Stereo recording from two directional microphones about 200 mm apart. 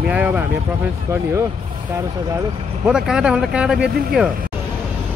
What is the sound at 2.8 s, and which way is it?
Speech, 5° right (ahead or behind).